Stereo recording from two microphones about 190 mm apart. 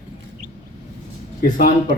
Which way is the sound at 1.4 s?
45° left (ahead or behind).